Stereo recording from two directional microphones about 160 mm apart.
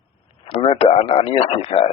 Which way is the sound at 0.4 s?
35° left (ahead or behind).